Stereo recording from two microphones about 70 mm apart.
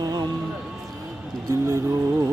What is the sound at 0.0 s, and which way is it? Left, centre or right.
Music, right.